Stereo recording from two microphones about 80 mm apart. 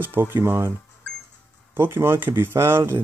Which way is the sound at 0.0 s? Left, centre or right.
Right.